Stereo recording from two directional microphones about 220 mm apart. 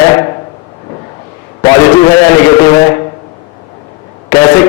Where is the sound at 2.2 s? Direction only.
15° left (ahead or behind).